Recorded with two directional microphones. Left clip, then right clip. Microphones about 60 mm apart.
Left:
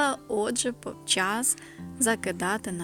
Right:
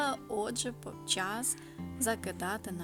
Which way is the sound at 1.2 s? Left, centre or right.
Left.